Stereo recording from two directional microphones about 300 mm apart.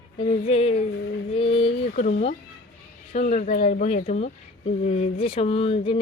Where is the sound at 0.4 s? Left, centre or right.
Centre.